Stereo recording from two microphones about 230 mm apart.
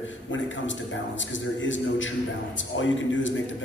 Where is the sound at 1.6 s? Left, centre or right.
Left.